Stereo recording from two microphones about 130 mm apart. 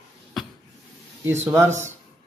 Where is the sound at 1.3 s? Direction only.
20° right (ahead or behind).